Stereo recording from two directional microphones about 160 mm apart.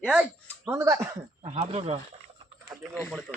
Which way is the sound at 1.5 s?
40° right (ahead or behind).